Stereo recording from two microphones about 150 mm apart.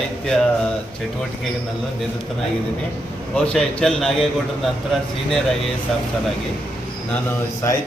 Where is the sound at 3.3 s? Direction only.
5° left (ahead or behind).